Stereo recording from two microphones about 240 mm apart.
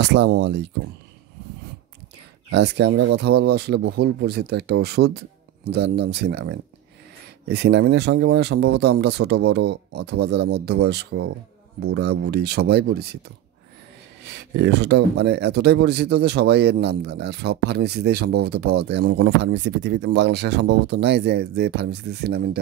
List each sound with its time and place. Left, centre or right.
0.0 s speech: right
2.5 s speech: right
14.2 s speech: right